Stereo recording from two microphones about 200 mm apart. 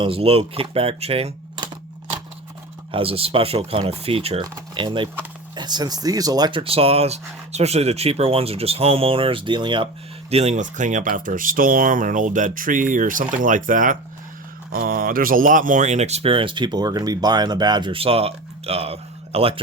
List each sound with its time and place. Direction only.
0.0 s speech: 25° right (ahead or behind)
2.9 s speech: 30° right (ahead or behind)